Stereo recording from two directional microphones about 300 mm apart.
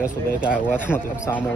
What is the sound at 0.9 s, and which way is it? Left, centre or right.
Speech, centre.